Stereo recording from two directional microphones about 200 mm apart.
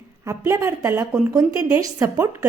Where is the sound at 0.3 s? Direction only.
15° right (ahead or behind).